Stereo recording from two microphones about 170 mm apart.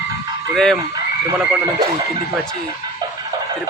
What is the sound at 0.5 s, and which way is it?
Speech, 5° left (ahead or behind).